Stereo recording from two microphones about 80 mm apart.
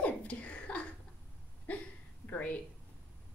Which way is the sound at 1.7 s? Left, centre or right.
Centre.